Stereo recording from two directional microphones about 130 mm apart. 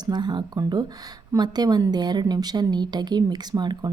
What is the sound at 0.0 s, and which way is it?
A woman's voice, 35° right (ahead or behind).